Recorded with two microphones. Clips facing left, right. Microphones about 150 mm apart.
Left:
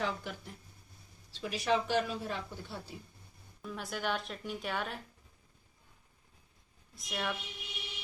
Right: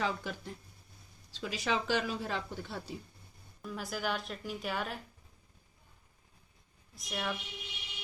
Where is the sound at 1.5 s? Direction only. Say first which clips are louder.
Left 2 dB; 90° right.